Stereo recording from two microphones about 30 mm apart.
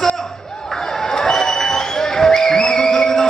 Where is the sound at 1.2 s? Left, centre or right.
Centre.